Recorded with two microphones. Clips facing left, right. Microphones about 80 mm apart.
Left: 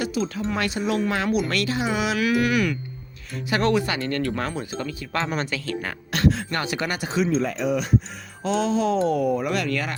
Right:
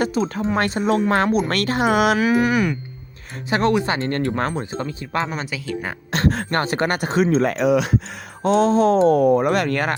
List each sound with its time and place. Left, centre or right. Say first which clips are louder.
0.0 s speech: right 5 dB; right
2.1 s speech: right 4 dB; right
5.3 s speech: even; centre
6.1 s speech: right 1 dB; right
8.4 s speech: right 6 dB; right